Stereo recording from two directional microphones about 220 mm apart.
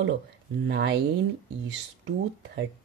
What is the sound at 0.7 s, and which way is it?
Speech, 50° right (ahead or behind).